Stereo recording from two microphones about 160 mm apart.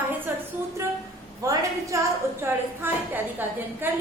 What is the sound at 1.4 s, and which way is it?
A woman's voice, 20° right (ahead or behind).